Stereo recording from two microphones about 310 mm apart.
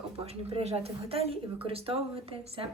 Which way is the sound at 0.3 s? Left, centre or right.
Centre.